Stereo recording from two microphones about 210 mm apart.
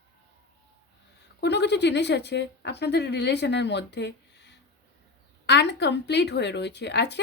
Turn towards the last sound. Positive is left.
turn(degrees=55)  # may be behind; listen again after turning